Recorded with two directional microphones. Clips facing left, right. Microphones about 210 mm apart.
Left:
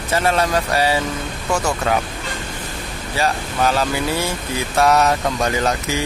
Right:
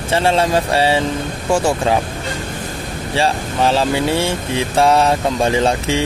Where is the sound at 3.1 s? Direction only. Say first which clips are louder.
Right 3 dB; 30° right (ahead or behind).